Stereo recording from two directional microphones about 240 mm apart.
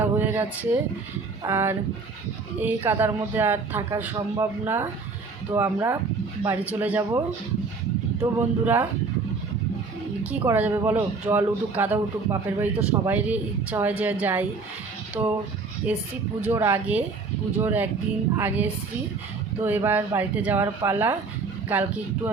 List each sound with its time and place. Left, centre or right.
0.0 s a sound: centre
1.5 s speech: centre
8.2 s speech: centre
10.2 s speech: centre
16.4 s speech: centre